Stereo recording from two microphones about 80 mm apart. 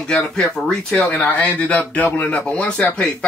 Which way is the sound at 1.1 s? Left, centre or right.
Centre.